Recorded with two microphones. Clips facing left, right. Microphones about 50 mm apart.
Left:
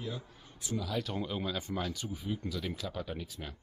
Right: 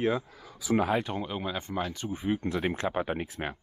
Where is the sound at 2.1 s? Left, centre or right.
Right.